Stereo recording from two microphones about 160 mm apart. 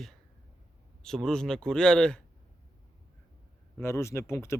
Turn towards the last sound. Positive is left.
turn(degrees=15)  # may be behind; listen again after turning